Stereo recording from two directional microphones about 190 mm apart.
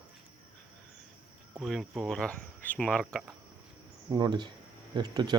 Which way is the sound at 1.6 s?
Centre (ahead or behind).